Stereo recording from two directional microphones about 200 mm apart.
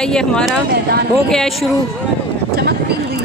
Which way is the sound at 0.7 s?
55° right (ahead or behind).